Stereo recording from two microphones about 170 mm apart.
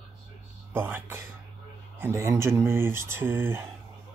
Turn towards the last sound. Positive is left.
turn(degrees=-15)  # may be behind; listen again after turning